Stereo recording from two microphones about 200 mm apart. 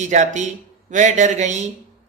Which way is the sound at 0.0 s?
35° right (ahead or behind).